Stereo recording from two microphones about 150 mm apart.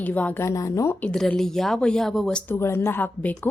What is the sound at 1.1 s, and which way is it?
Speech, 5° left (ahead or behind).